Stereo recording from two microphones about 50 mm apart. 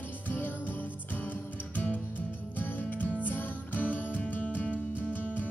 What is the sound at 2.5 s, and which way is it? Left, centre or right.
Music, left.